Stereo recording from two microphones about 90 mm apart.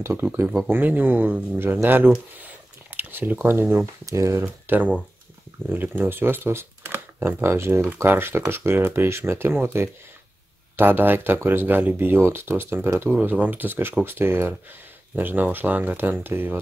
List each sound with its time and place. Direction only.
0.0 s speech: 25° right (ahead or behind)
4.0 s speech: 35° right (ahead or behind)
5.7 s speech: 20° right (ahead or behind)